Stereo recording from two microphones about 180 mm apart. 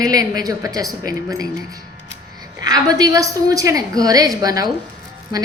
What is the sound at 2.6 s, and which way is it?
A woman's voice, 20° right (ahead or behind).